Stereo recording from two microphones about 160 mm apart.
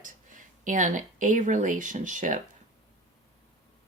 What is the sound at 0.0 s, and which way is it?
Speech, 55° right (ahead or behind).